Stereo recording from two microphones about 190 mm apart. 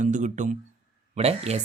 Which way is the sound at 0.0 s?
40° right (ahead or behind).